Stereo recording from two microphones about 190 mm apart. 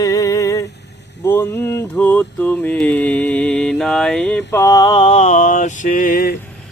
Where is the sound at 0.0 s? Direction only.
15° left (ahead or behind).